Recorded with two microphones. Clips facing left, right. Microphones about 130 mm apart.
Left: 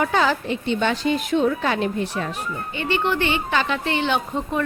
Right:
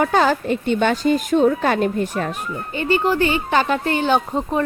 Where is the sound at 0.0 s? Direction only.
45° right (ahead or behind).